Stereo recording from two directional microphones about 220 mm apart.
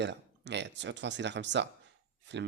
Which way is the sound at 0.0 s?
50° right (ahead or behind).